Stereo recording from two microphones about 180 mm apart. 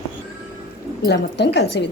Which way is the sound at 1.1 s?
70° left (ahead or behind).